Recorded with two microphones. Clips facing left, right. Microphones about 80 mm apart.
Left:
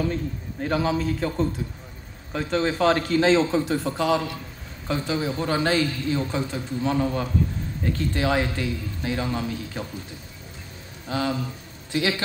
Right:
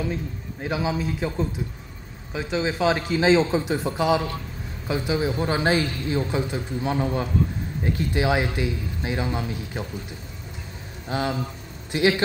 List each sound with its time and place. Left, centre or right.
0.0 s a man's voice: centre
11.1 s a man's voice: right